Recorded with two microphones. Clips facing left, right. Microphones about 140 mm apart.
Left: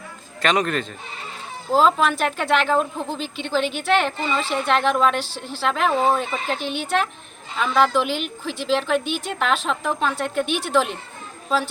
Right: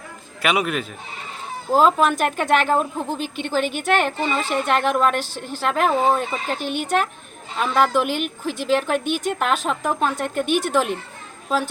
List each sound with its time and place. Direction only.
0.4 s a woman's voice: 10° right (ahead or behind)
1.8 s speech: 45° right (ahead or behind)
2.6 s a woman's voice: 15° right (ahead or behind)
3.2 s speech: 50° right (ahead or behind)
4.7 s a woman's voice: 10° right (ahead or behind)
5.1 s speech: 50° right (ahead or behind)
7.6 s a woman's voice: 5° right (ahead or behind)
7.9 s speech: 50° right (ahead or behind)